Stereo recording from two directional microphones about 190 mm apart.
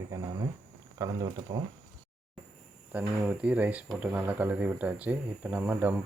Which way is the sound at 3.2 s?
10° right (ahead or behind).